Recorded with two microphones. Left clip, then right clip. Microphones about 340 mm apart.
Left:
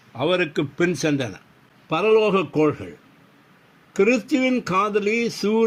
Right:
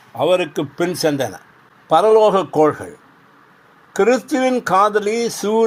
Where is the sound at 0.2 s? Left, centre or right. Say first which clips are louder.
Right 5 dB; right.